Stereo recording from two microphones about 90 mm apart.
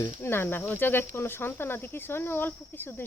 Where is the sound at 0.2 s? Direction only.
25° left (ahead or behind).